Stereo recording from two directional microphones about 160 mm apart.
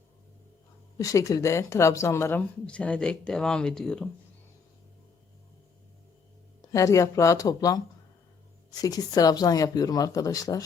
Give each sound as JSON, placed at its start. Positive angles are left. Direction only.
{"t": 0.9, "sound": "speech", "side_deg": 20}
{"t": 6.6, "sound": "speech", "side_deg": 20}
{"t": 8.8, "sound": "speech", "side_deg": 25}